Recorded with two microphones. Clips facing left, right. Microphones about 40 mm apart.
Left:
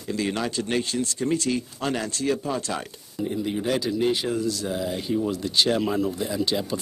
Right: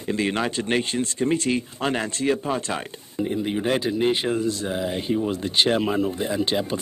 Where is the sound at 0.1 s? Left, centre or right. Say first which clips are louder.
Right 3 dB; right.